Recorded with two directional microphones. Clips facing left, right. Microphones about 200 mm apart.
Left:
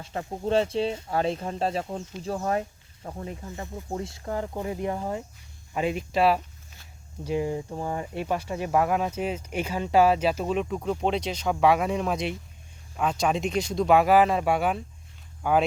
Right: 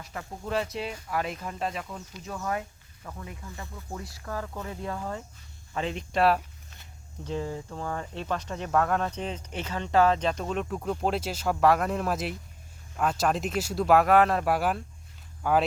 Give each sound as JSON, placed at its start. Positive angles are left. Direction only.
{"t": 0.0, "sound": "speech", "side_deg": 30}
{"t": 3.5, "sound": "speech", "side_deg": 25}
{"t": 7.3, "sound": "speech", "side_deg": 15}